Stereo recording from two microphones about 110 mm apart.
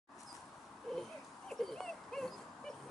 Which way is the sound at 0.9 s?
Centre (ahead or behind).